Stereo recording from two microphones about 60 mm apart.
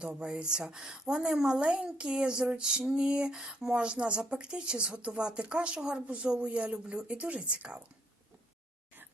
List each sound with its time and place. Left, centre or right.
0.0 s a woman's voice: centre